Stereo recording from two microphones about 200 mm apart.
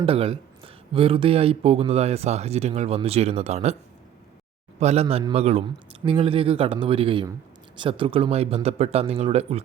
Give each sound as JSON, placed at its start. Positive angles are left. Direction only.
{"t": 0.0, "sound": "speech", "side_deg": -30}
{"t": 4.8, "sound": "speech", "side_deg": -30}